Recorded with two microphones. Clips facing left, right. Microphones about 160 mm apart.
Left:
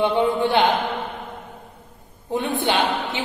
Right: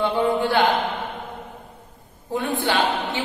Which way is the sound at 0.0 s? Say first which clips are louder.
Left 1 dB; 20° left (ahead or behind).